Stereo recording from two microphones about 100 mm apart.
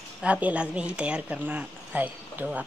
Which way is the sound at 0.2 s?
15° right (ahead or behind).